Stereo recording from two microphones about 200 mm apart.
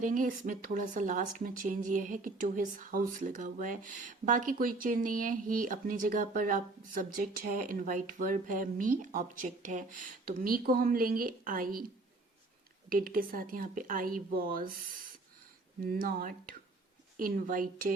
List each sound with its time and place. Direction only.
0.0 s speech: 40° right (ahead or behind)
12.9 s speech: 45° right (ahead or behind)
15.8 s speech: 45° right (ahead or behind)